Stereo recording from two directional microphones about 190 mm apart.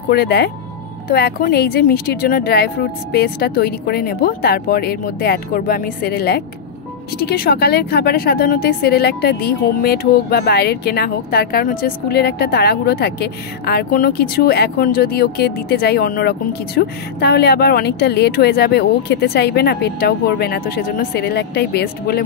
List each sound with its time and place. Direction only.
0.1 s a woman's voice: 55° left (ahead or behind)